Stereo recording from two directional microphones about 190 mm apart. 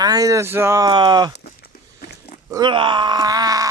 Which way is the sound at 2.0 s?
45° left (ahead or behind).